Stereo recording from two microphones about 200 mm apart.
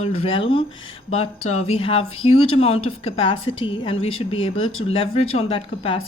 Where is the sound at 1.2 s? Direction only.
30° left (ahead or behind).